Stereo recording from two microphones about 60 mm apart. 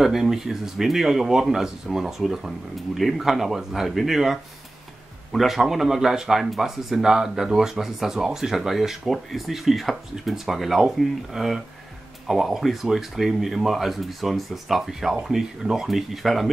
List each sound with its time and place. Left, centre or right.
0.0 s speech: centre